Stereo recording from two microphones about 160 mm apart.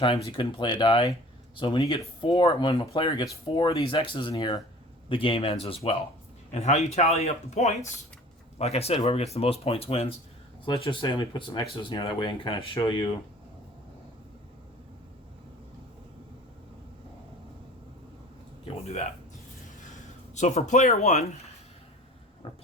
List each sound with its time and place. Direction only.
0.3 s speech: 30° left (ahead or behind)
18.9 s speech: 45° left (ahead or behind)
20.3 s speech: 45° left (ahead or behind)